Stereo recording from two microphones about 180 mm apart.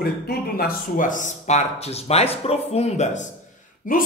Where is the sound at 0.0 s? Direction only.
55° left (ahead or behind); by 3.3 s 40° left (ahead or behind).